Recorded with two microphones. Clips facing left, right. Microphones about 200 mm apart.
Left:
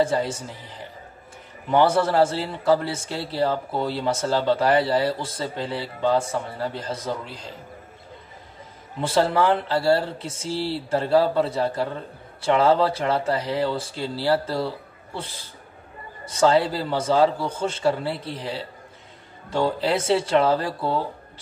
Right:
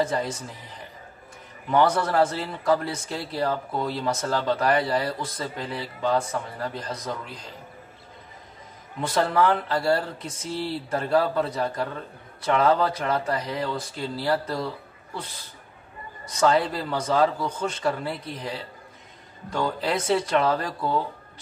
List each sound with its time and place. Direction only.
0.0 s a man's voice: 30° left (ahead or behind)
9.0 s a man's voice: 30° left (ahead or behind)